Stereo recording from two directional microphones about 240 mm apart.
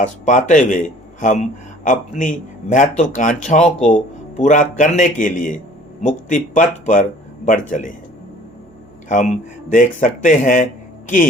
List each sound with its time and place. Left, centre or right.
0.0 s a man's voice: left
9.0 s a man's voice: left